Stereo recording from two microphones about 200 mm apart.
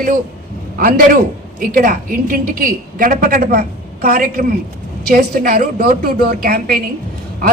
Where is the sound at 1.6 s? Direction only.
45° right (ahead or behind).